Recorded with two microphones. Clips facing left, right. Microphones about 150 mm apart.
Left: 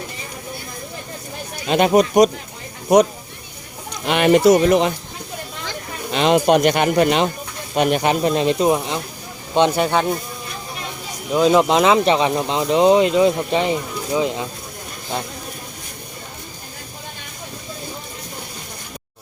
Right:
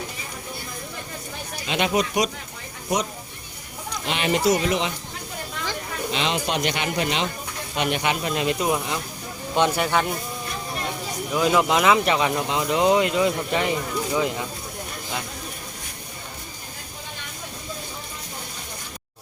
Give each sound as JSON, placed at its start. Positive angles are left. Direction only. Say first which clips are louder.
{"t": 1.6, "sound": "speech", "louder": "left 8 dB", "side_deg": 45}
{"t": 4.0, "sound": "speech", "louder": "left 9 dB", "side_deg": 55}
{"t": 6.1, "sound": "speech", "louder": "left 11 dB", "side_deg": 50}
{"t": 11.3, "sound": "speech", "louder": "left 6 dB", "side_deg": 25}